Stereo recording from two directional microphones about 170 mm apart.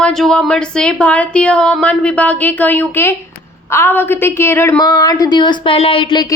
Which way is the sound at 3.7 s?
15° left (ahead or behind).